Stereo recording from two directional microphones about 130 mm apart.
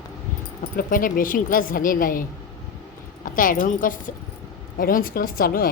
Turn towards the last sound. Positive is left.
turn(degrees=90)